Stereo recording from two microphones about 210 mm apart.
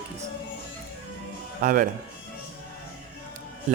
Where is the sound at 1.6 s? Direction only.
40° right (ahead or behind).